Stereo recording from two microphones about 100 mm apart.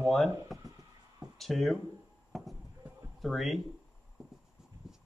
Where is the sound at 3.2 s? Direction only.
Centre (ahead or behind).